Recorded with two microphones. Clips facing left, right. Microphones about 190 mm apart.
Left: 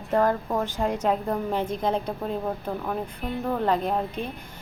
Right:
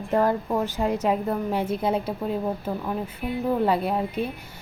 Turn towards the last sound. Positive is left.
turn(degrees=-10)  # may be behind; listen again after turning